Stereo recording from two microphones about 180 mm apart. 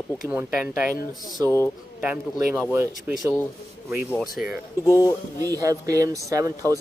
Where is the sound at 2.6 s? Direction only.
10° right (ahead or behind).